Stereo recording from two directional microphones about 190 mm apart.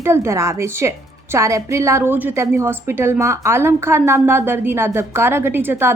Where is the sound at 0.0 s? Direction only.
15° right (ahead or behind).